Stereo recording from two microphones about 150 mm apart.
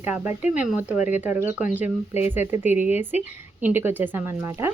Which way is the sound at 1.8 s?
50° left (ahead or behind).